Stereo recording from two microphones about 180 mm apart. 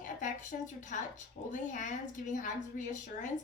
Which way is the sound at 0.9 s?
45° left (ahead or behind).